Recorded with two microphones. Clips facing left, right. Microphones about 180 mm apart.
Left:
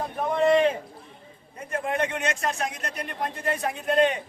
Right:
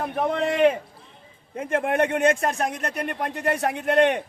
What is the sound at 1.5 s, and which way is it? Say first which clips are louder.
Speech: right 5 dB; 90° right.